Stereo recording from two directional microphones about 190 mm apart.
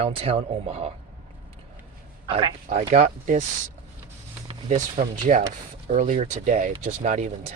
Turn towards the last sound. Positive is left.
turn(degrees=-40)  # may be behind; listen again after turning